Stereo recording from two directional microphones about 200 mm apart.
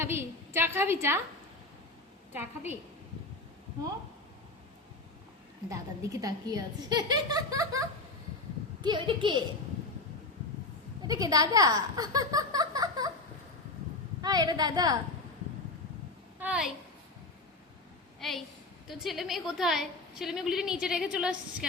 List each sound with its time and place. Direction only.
0.0 s speech: 10° right (ahead or behind)
5.6 s speech: 15° right (ahead or behind)
11.0 s speech: 20° right (ahead or behind)
14.2 s speech: 20° right (ahead or behind)
16.4 s a woman's voice: 5° right (ahead or behind)
18.2 s a woman's voice: centre (ahead or behind)